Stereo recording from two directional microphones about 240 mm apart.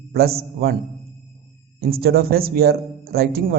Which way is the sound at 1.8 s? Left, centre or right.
Right.